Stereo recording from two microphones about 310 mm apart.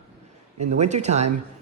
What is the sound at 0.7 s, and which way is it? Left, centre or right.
Speech, right.